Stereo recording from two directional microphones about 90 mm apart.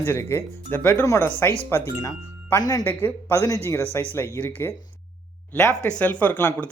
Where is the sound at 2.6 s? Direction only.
45° left (ahead or behind).